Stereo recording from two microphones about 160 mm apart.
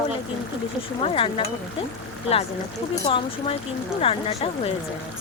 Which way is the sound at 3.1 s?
30° left (ahead or behind).